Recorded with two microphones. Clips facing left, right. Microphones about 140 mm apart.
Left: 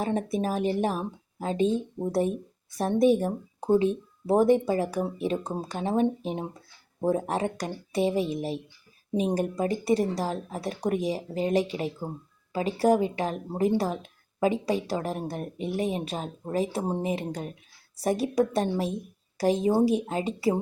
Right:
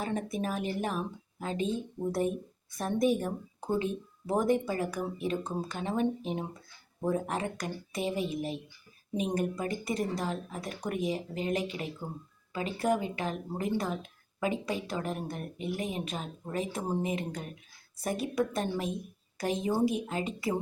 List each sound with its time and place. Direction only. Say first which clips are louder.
0.0 s a woman's voice: left 5 dB; 35° left (ahead or behind)